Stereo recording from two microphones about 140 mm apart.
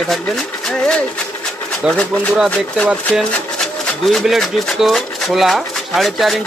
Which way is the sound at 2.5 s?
10° left (ahead or behind).